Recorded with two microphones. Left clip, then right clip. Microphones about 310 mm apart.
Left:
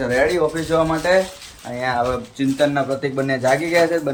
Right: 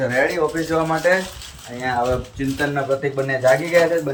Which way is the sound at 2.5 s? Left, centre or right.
Centre.